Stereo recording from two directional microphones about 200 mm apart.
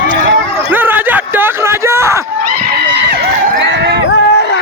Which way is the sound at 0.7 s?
10° right (ahead or behind).